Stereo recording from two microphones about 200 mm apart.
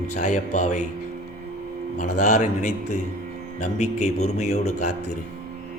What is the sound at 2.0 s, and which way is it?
A man's voice, 40° left (ahead or behind).